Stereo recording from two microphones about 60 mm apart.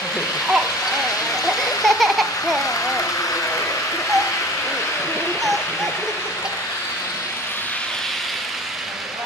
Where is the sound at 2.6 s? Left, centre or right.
Left.